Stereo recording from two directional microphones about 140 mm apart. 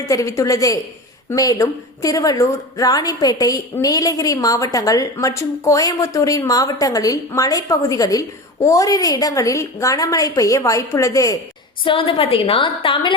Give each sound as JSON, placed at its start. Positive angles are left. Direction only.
{"t": 0.1, "sound": "a woman's voice", "side_deg": 25}
{"t": 11.9, "sound": "a woman's voice", "side_deg": 40}